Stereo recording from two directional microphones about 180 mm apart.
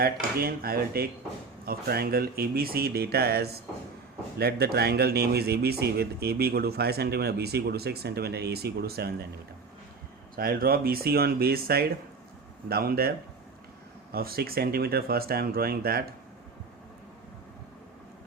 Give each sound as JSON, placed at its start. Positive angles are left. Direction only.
{"t": 0.0, "sound": "speech", "side_deg": -55}
{"t": 10.3, "sound": "speech", "side_deg": -55}